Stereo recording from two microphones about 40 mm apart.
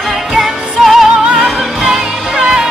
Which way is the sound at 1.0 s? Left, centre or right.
Centre.